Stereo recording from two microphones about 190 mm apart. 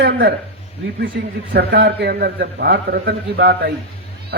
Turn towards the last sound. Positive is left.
turn(degrees=-55)  # may be behind; listen again after turning